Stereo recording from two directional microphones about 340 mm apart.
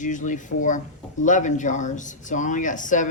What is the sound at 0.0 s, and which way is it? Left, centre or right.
Speech, left.